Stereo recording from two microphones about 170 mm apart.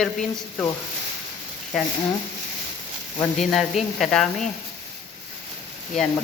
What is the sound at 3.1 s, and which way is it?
A woman's voice, centre (ahead or behind).